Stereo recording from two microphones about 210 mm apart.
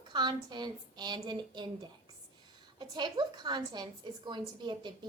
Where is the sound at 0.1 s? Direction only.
20° right (ahead or behind).